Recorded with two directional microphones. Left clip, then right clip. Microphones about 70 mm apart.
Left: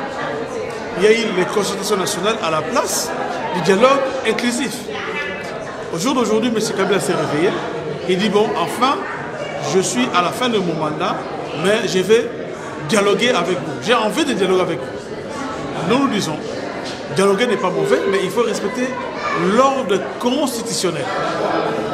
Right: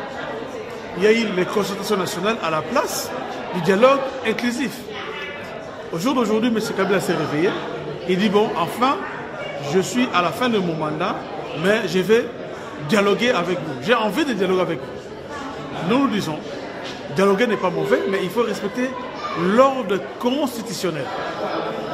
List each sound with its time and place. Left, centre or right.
0.9 s a man's voice: left
6.0 s a man's voice: left
15.9 s a man's voice: left
17.2 s a man's voice: centre
17.6 s a man's voice: left